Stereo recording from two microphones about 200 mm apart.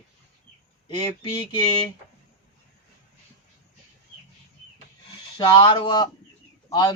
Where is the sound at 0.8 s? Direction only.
25° left (ahead or behind).